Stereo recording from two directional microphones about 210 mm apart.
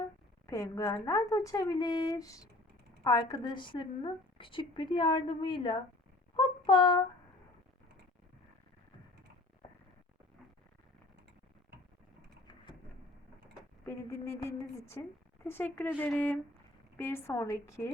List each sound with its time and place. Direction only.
0.4 s a woman's voice: 15° left (ahead or behind)
13.8 s a woman's voice: 15° left (ahead or behind)